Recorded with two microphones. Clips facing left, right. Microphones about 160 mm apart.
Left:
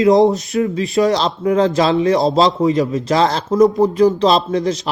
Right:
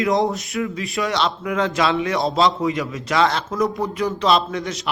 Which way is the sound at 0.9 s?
40° left (ahead or behind).